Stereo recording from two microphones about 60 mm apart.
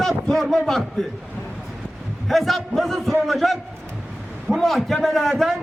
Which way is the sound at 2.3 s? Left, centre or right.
Centre.